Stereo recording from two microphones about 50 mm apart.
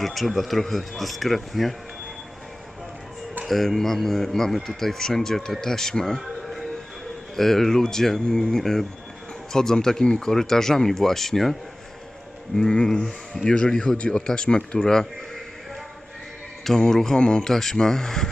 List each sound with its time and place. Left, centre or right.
0.0 s speech: centre
3.4 s speech: centre
6.1 s music: centre
7.3 s speech: centre
12.7 s speech: centre
16.6 s speech: centre